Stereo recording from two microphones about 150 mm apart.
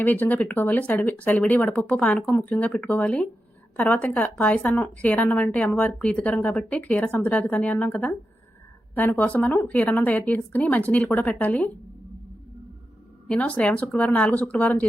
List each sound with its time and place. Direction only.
0.0 s a woman's voice: 10° left (ahead or behind)
13.2 s a woman's voice: 5° left (ahead or behind)